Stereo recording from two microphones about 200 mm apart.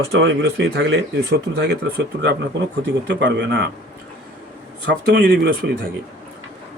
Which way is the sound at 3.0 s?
60° right (ahead or behind).